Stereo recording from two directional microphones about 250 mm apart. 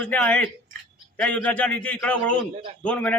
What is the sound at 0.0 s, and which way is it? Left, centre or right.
A man's voice, centre.